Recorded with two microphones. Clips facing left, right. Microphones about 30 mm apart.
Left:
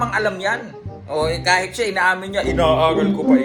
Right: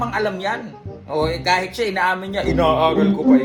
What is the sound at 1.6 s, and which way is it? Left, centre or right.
Speech, left.